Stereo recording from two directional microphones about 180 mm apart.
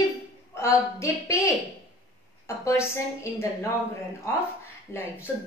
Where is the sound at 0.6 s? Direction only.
15° left (ahead or behind).